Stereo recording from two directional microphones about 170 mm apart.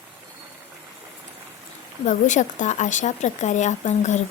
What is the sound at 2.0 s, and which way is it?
Speech, 45° left (ahead or behind).